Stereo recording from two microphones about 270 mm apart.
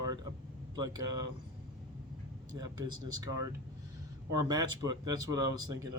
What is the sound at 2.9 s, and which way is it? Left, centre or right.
Speech, right.